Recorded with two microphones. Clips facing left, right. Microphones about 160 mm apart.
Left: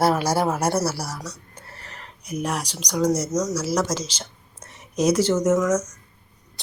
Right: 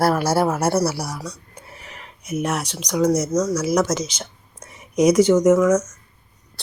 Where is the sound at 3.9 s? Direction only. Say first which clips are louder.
Right 4 dB; 10° left (ahead or behind).